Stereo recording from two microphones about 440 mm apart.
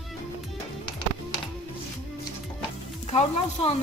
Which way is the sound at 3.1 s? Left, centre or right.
Centre.